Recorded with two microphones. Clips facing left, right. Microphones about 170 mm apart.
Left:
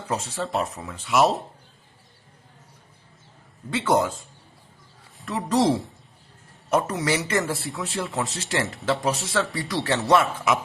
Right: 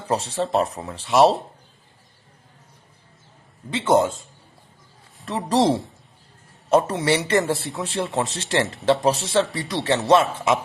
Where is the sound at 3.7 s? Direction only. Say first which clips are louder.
Right 3 dB; 25° right (ahead or behind).